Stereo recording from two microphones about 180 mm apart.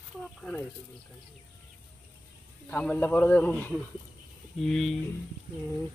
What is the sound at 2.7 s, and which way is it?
Speech, 10° left (ahead or behind).